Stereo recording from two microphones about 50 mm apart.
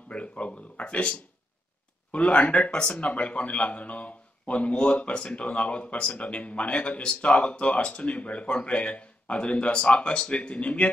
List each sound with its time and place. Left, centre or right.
0.1 s speech: left
2.1 s speech: left